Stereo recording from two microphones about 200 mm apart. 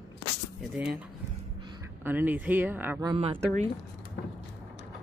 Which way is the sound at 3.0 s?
25° right (ahead or behind).